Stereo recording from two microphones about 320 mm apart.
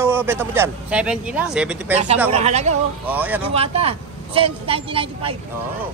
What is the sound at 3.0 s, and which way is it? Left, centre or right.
Speech, centre.